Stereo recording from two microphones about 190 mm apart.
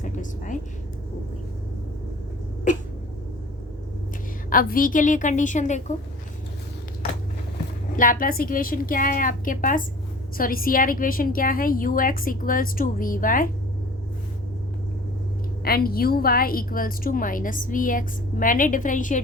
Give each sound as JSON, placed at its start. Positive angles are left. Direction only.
{"t": 0.0, "sound": "a sound", "side_deg": 40}
{"t": 4.4, "sound": "a woman's voice", "side_deg": 45}
{"t": 7.9, "sound": "a woman's voice", "side_deg": 45}
{"t": 15.6, "sound": "a woman's voice", "side_deg": 50}